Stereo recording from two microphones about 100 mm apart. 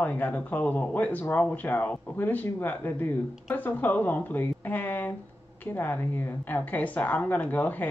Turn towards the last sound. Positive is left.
turn(degrees=15)  # may be behind; listen again after turning